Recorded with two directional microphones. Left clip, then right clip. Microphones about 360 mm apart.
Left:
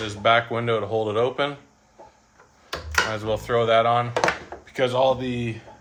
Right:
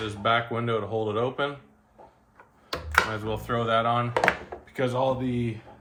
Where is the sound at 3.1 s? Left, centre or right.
Left.